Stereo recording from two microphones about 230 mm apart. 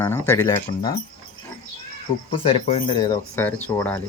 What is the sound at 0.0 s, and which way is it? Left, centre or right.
Speech, centre.